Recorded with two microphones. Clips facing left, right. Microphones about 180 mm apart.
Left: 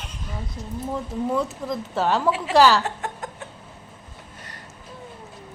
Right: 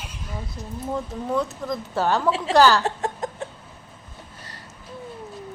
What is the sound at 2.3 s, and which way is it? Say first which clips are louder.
Speech: even; 30° right (ahead or behind).